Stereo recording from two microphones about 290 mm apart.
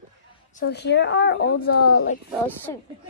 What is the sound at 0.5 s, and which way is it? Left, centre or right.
A woman's voice, left.